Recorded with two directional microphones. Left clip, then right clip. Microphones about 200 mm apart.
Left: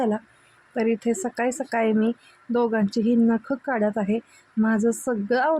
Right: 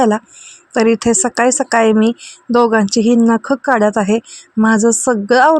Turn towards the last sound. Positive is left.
turn(degrees=-25)  # may be behind; listen again after turning